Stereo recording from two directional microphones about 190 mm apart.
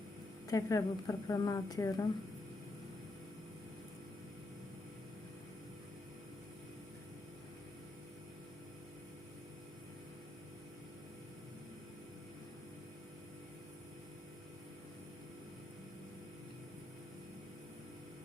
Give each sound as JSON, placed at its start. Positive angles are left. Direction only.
{"t": 0.5, "sound": "a woman's voice", "side_deg": 20}